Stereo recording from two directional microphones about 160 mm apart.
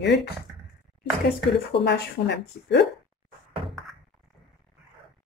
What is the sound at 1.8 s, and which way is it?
Speech, 90° left.